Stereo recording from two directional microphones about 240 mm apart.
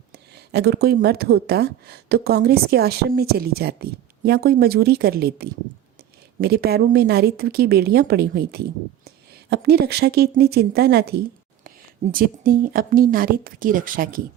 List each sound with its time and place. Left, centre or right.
0.3 s speech: right